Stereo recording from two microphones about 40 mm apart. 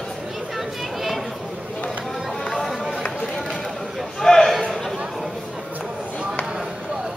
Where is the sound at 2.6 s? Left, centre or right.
Centre.